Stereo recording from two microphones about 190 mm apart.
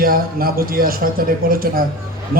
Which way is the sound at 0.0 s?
50° right (ahead or behind).